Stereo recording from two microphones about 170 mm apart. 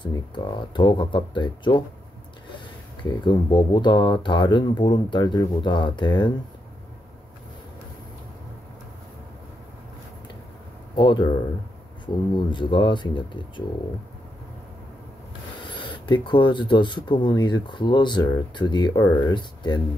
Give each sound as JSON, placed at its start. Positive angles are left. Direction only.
{"t": 0.0, "sound": "speech", "side_deg": 25}
{"t": 3.0, "sound": "speech", "side_deg": 25}
{"t": 11.0, "sound": "speech", "side_deg": 25}
{"t": 12.4, "sound": "speech", "side_deg": 25}
{"t": 15.7, "sound": "speech", "side_deg": 30}